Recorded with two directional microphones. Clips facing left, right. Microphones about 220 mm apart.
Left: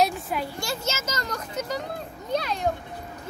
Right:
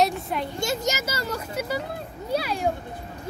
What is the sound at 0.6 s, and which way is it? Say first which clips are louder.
A child's voice: right 4 dB; 20° right (ahead or behind).